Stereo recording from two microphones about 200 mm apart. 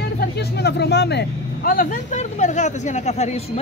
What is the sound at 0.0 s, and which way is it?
Speech, 55° left (ahead or behind).